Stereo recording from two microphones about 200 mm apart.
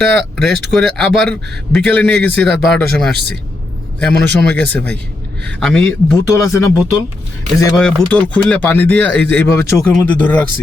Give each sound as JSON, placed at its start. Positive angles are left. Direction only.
{"t": 0.0, "sound": "a man's voice", "side_deg": 0}
{"t": 6.1, "sound": "speech", "side_deg": 15}
{"t": 7.8, "sound": "speech", "side_deg": 5}